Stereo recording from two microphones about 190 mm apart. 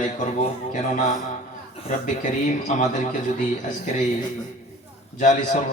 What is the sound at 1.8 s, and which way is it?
A man's voice, 40° left (ahead or behind).